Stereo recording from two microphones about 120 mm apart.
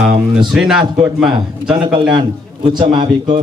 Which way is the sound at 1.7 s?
40° right (ahead or behind).